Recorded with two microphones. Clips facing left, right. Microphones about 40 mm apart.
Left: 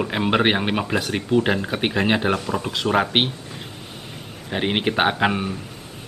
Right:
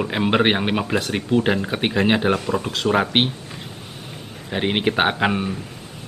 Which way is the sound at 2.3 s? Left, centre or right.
Right.